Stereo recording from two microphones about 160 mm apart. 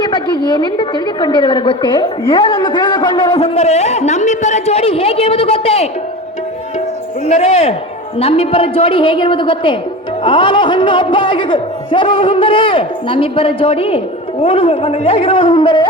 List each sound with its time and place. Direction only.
0.0 s a woman's voice: 25° left (ahead or behind)
7.3 s a woman's voice: 40° left (ahead or behind)